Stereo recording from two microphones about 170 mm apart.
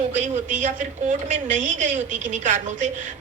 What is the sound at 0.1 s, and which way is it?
A woman's voice, 45° right (ahead or behind).